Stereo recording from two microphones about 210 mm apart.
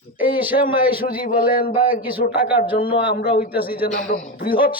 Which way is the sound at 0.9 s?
45° left (ahead or behind).